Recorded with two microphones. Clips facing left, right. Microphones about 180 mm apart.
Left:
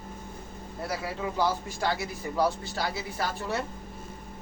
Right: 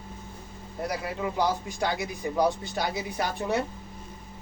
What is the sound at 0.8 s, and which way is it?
A man's voice, 15° right (ahead or behind).